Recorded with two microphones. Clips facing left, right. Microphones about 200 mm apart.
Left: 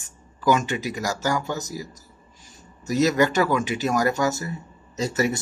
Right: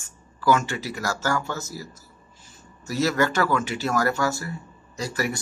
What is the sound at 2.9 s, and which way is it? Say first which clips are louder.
Speech: left 3 dB; 20° left (ahead or behind).